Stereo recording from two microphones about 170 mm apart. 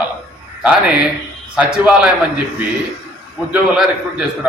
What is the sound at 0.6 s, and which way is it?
A man's voice, 5° right (ahead or behind).